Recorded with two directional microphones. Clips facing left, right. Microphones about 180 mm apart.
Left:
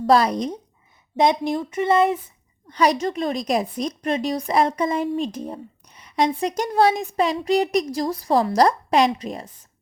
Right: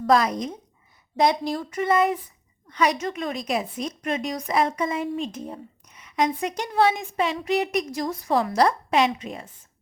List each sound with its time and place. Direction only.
0.0 s a woman's voice: 30° left (ahead or behind)
1.1 s a woman's voice: 20° left (ahead or behind); by 9.5 s 40° left (ahead or behind)